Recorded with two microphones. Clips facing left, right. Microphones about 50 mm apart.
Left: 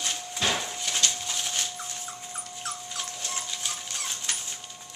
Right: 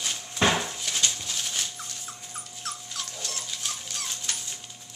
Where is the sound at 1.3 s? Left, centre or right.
Centre.